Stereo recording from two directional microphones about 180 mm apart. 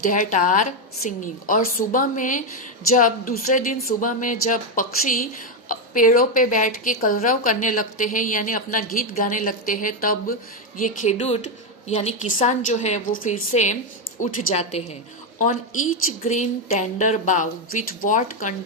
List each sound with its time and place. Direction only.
0.1 s a woman's voice: 45° left (ahead or behind)